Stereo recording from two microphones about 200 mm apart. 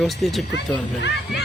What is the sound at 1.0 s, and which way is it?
Speech, 60° left (ahead or behind).